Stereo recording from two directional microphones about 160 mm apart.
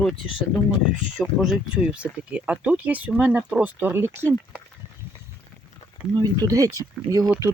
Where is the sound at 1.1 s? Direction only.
Centre (ahead or behind).